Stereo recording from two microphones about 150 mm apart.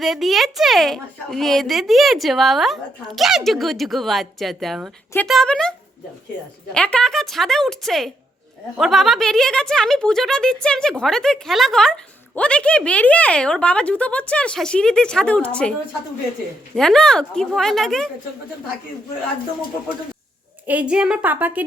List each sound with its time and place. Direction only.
0.0 s speech: centre (ahead or behind)
6.7 s speech: 5° left (ahead or behind)
16.7 s speech: 5° left (ahead or behind)
20.7 s a woman's voice: 10° right (ahead or behind)